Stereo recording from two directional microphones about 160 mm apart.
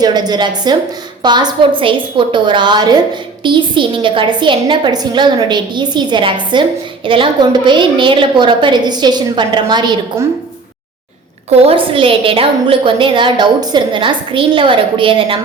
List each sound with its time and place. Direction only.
0.0 s a woman's voice: 25° right (ahead or behind)
11.4 s a woman's voice: 35° right (ahead or behind)